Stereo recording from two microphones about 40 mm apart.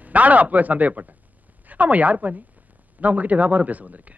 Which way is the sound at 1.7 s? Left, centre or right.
Right.